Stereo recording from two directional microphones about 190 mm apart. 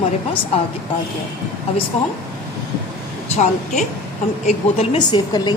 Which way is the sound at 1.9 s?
35° left (ahead or behind).